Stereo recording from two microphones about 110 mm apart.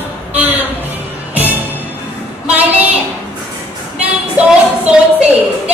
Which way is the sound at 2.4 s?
15° right (ahead or behind).